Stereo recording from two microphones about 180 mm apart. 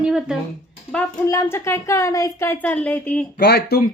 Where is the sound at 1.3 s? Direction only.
15° left (ahead or behind).